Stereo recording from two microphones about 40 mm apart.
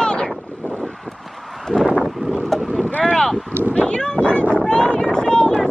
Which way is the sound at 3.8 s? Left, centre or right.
Centre.